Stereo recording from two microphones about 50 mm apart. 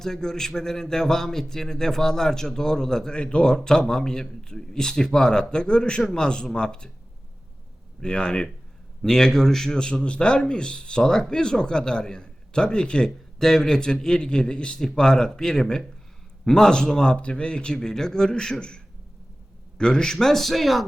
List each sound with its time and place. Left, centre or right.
0.0 s a man's voice: centre
8.0 s a man's voice: centre
19.8 s speech: centre